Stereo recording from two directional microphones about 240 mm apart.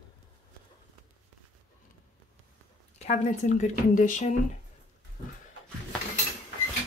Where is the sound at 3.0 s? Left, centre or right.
Left.